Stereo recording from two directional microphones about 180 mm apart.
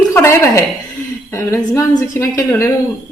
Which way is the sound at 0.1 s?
15° left (ahead or behind).